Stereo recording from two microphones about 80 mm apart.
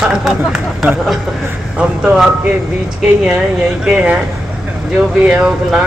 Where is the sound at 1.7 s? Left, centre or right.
Centre.